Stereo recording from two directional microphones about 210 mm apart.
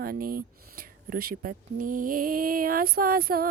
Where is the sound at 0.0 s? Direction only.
45° right (ahead or behind).